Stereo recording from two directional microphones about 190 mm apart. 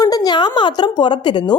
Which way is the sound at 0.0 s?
20° left (ahead or behind).